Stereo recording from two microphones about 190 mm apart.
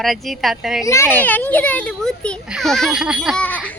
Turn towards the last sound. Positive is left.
turn(degrees=5)  # may be behind; listen again after turning